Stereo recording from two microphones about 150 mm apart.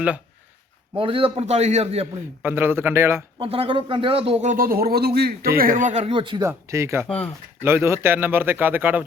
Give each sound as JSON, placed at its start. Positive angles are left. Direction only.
{"t": 0.9, "sound": "a man's voice", "side_deg": -35}
{"t": 2.4, "sound": "a man's voice", "side_deg": -15}
{"t": 3.3, "sound": "speech", "side_deg": -40}
{"t": 4.4, "sound": "speech", "side_deg": -70}
{"t": 5.5, "sound": "a man's voice", "side_deg": -65}
{"t": 6.4, "sound": "a man's voice", "side_deg": -20}